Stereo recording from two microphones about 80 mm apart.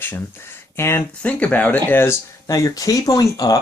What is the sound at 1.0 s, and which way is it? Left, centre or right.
Speech, centre.